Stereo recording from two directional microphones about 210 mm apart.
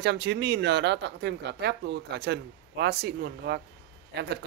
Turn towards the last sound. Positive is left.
turn(degrees=-55)  # may be behind; listen again after turning